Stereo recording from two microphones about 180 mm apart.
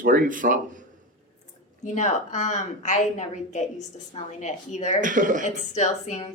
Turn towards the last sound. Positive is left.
turn(degrees=40)  # may be behind; listen again after turning